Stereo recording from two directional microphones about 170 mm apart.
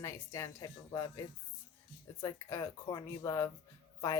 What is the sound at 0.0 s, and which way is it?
A woman's voice, 15° left (ahead or behind).